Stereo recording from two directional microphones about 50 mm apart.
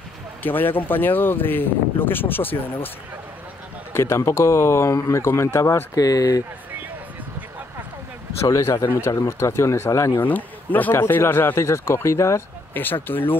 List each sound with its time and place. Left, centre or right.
0.4 s speech: left
3.9 s speech: left
8.5 s speech: left
9.2 s speech: left
10.2 s speech: left
11.1 s speech: left
12.7 s speech: left